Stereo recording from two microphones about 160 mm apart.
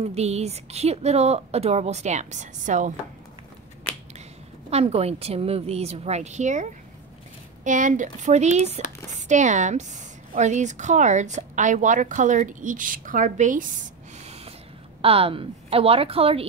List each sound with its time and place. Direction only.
0.0 s a woman's voice: 40° right (ahead or behind)
4.6 s a woman's voice: 40° right (ahead or behind)
14.2 s a sound: 40° right (ahead or behind)
15.0 s a woman's voice: 35° right (ahead or behind)